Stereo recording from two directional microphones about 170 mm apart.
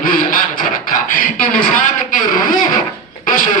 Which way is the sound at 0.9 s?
50° left (ahead or behind).